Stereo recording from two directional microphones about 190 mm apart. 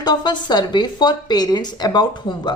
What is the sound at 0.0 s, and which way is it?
A woman's voice, 20° left (ahead or behind).